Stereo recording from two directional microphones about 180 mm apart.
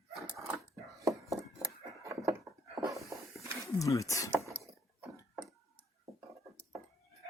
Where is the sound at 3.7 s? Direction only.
20° left (ahead or behind).